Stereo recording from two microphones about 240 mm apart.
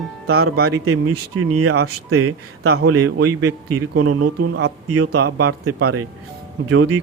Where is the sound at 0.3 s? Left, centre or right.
Right.